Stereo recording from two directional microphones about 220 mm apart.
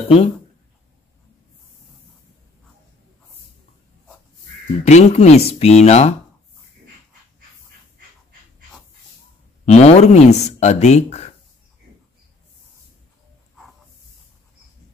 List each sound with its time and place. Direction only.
4.8 s speech: 30° left (ahead or behind)
9.7 s speech: 30° left (ahead or behind)